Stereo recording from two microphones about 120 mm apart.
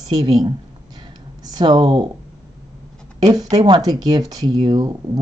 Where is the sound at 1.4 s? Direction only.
35° right (ahead or behind).